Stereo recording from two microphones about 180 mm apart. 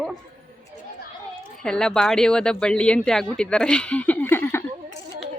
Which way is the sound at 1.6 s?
5° left (ahead or behind).